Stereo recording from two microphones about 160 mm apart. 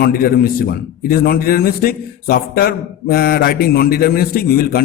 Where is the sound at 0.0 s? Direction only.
65° left (ahead or behind).